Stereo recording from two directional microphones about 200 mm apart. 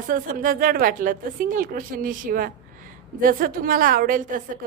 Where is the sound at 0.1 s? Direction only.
45° right (ahead or behind).